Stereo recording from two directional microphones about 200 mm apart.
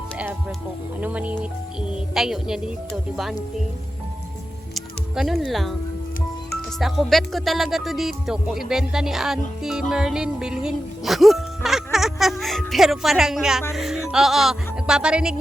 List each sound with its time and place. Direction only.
1.0 s speech: 5° right (ahead or behind)
4.7 s music: centre (ahead or behind)
6.7 s speech: centre (ahead or behind)